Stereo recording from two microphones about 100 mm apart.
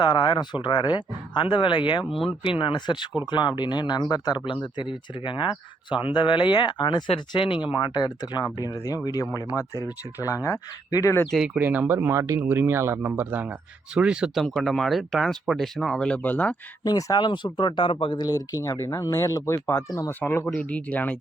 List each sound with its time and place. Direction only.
0.0 s speech: 50° left (ahead or behind)
2.0 s speech: centre (ahead or behind)
2.4 s speech: 60° left (ahead or behind)
7.7 s speech: 50° left (ahead or behind)
11.3 s speech: 5° right (ahead or behind)
11.6 s speech: 20° right (ahead or behind)
14.4 s speech: 5° left (ahead or behind)
16.8 s speech: 40° left (ahead or behind)
18.6 s speech: 30° left (ahead or behind)
20.1 s speech: 20° left (ahead or behind)